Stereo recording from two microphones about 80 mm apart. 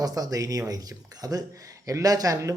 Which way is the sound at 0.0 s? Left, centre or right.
Right.